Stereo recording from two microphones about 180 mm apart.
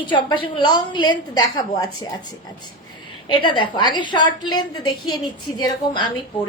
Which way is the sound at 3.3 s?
25° left (ahead or behind).